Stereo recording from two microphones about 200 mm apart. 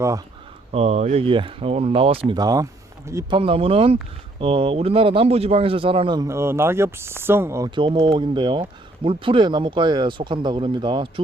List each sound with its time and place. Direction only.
0.7 s speech: 30° right (ahead or behind); by 3.3 s 15° right (ahead or behind)
3.3 s speech: 25° right (ahead or behind)
7.8 s speech: 25° right (ahead or behind)